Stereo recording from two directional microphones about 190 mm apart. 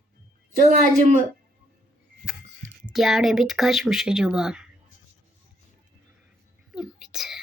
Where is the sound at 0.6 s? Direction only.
40° right (ahead or behind).